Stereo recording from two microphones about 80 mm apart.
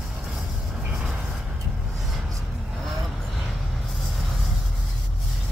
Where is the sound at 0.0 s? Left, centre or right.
Centre.